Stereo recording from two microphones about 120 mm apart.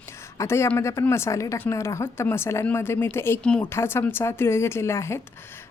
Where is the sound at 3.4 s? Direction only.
10° left (ahead or behind).